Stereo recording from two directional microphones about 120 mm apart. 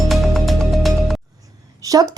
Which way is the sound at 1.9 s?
35° right (ahead or behind).